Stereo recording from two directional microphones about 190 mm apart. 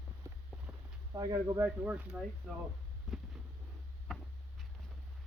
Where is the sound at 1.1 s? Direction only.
20° right (ahead or behind).